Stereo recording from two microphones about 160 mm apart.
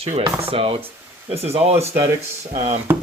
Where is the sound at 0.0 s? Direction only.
40° right (ahead or behind).